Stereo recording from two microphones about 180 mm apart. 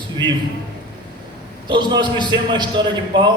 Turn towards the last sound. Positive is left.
turn(degrees=-25)  # may be behind; listen again after turning